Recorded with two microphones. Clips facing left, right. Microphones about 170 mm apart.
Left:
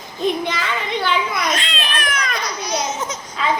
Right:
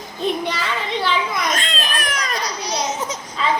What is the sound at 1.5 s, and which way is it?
Babbling, 45° right (ahead or behind).